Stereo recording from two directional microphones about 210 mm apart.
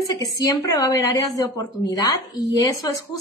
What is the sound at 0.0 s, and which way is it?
A woman's voice, 15° left (ahead or behind).